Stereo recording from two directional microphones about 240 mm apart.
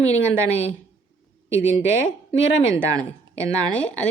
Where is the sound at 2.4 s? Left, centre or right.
Left.